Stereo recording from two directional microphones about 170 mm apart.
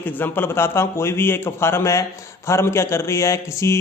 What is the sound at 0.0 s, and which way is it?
Speech, 10° left (ahead or behind).